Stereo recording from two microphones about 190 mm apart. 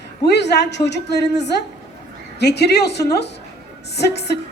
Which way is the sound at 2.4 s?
60° left (ahead or behind).